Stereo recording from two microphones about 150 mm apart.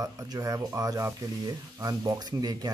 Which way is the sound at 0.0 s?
25° right (ahead or behind).